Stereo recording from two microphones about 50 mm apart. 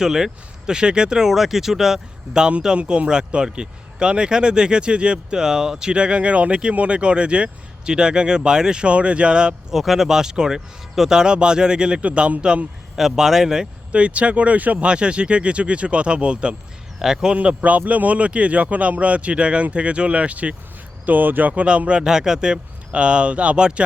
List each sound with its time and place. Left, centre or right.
0.0 s speech: centre
9.7 s speech: centre; by 12.6 s right
13.0 s speech: centre
13.9 s speech: right
14.8 s speech: right
17.0 s speech: centre
17.3 s speech: right